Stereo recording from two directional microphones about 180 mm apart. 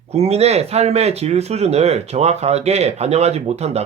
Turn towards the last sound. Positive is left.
turn(degrees=-35)  # may be behind; listen again after turning